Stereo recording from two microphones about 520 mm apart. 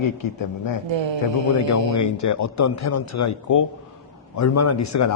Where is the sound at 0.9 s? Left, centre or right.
Right.